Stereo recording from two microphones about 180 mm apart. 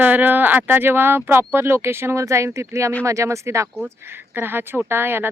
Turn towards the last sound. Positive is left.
turn(degrees=-10)  # may be behind; listen again after turning